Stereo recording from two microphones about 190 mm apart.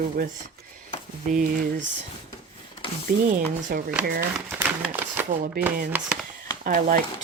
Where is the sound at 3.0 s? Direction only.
45° right (ahead or behind).